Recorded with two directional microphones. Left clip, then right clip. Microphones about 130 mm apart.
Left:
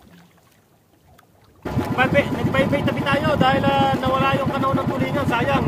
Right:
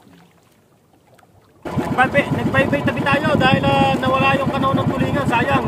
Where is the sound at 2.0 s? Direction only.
5° right (ahead or behind).